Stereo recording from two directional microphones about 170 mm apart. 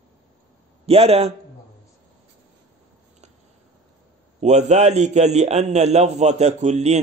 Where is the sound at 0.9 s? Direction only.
35° right (ahead or behind).